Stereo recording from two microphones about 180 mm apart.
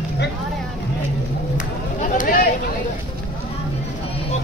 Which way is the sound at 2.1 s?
50° left (ahead or behind).